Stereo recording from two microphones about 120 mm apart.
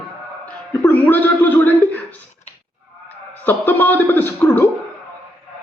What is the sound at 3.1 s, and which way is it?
A man's voice, 15° left (ahead or behind).